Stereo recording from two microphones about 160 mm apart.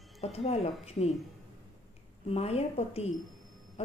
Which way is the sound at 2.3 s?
40° left (ahead or behind).